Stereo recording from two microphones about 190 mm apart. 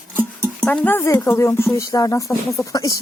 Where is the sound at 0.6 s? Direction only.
5° left (ahead or behind).